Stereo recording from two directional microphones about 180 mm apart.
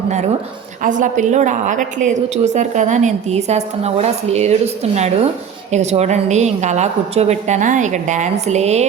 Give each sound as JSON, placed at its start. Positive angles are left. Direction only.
{"t": 0.8, "sound": "a woman's voice", "side_deg": -45}